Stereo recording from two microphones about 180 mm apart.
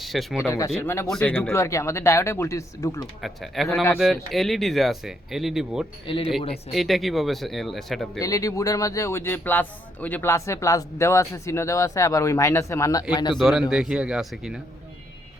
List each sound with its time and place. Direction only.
0.0 s speech: centre (ahead or behind)
0.4 s speech: 15° left (ahead or behind)
1.0 s speech: 5° left (ahead or behind)
3.2 s speech: centre (ahead or behind)
6.1 s speech: 30° left (ahead or behind)
6.7 s speech: centre (ahead or behind)
8.2 s speech: 20° left (ahead or behind)
13.3 s speech: centre (ahead or behind)